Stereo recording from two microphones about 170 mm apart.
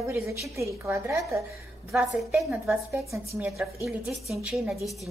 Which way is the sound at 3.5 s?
15° right (ahead or behind).